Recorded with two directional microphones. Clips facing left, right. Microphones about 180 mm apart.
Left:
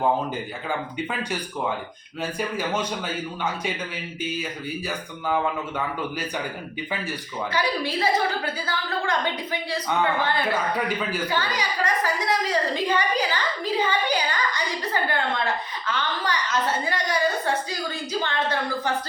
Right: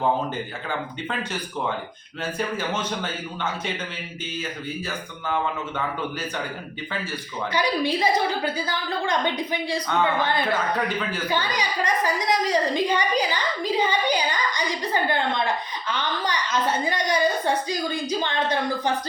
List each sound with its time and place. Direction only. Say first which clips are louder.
2.6 s a man's voice: left 1 dB; 10° left (ahead or behind)
5.2 s a man's voice: left 2 dB; 10° left (ahead or behind)
7.5 s a woman's voice: right 3 dB; 15° right (ahead or behind)
10.8 s a man's voice: even; 10° left (ahead or behind)
11.3 s a woman's voice: right 1 dB; 15° right (ahead or behind)